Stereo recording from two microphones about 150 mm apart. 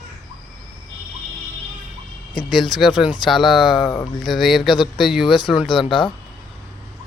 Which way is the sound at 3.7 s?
25° left (ahead or behind).